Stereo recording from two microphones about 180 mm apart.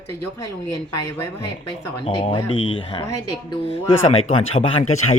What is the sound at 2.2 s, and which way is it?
Speech, 30° left (ahead or behind).